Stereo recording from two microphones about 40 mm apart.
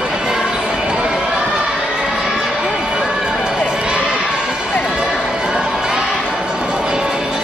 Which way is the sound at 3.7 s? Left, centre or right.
Right.